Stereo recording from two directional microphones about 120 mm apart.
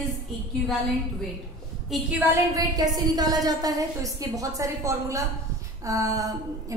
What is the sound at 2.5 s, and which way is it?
A woman's voice, 35° right (ahead or behind).